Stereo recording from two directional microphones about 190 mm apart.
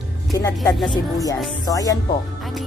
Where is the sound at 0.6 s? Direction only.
20° left (ahead or behind).